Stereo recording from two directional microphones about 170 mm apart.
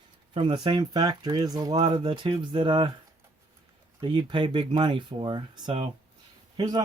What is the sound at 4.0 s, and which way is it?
Speech, 25° right (ahead or behind).